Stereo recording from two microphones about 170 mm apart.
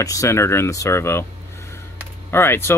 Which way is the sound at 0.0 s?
20° left (ahead or behind).